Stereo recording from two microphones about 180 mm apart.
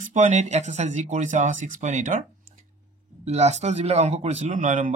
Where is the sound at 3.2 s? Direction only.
40° right (ahead or behind).